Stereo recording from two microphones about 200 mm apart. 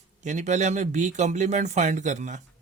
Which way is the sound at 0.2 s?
35° right (ahead or behind).